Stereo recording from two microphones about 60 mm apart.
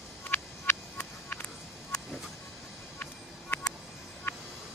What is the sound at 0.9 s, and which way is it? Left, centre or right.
Music, left.